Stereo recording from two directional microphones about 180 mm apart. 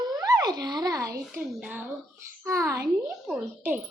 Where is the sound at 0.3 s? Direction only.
20° right (ahead or behind).